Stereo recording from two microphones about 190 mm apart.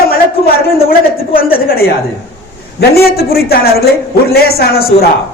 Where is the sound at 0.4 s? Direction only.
50° left (ahead or behind).